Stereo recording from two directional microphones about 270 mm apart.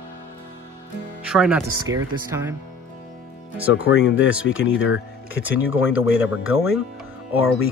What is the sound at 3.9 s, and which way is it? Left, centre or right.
Speech, left.